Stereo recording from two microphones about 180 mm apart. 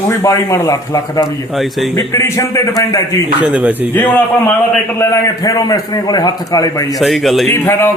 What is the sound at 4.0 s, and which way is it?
A man's voice, 10° left (ahead or behind).